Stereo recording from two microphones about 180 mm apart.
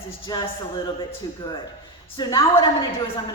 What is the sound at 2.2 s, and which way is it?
Speech, 25° left (ahead or behind).